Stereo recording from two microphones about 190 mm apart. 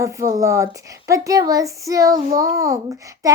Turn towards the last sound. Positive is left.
turn(degrees=-15)  # may be behind; listen again after turning